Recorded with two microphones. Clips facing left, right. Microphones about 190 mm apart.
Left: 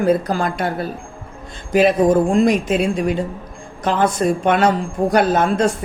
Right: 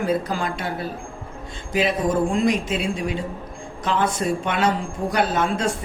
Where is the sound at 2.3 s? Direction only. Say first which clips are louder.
Left 6 dB; 45° left (ahead or behind).